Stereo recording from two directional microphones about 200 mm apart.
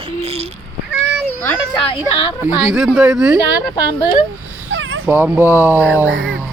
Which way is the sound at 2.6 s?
5° right (ahead or behind).